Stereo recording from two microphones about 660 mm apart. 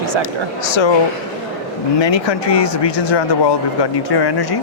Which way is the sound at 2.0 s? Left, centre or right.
Left.